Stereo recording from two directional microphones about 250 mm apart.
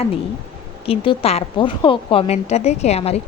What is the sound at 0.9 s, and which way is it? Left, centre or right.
A woman's voice, left.